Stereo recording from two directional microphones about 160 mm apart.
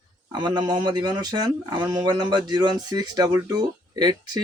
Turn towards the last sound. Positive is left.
turn(degrees=-25)  # may be behind; listen again after turning